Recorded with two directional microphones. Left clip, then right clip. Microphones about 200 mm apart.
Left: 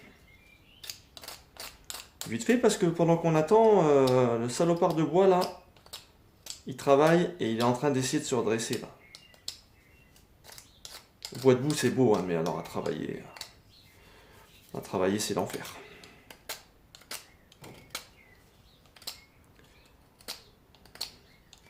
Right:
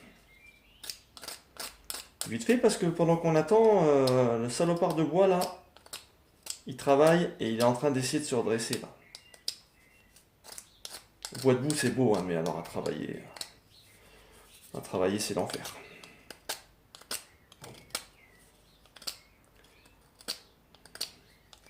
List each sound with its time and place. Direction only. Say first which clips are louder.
2.3 s speech: left 1 dB; 20° left (ahead or behind)
6.7 s speech: even; 20° left (ahead or behind)
11.4 s speech: left 3 dB; 25° left (ahead or behind)
14.7 s speech: left 1 dB; 20° left (ahead or behind)